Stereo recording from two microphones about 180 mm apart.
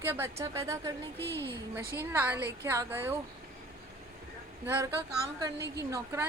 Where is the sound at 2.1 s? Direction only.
10° right (ahead or behind).